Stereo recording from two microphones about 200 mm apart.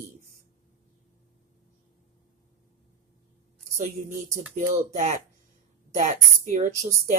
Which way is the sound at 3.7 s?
40° right (ahead or behind).